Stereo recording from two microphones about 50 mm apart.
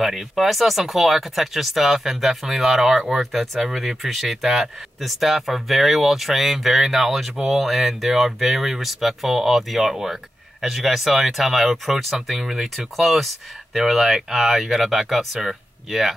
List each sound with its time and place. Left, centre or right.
0.0 s speech: centre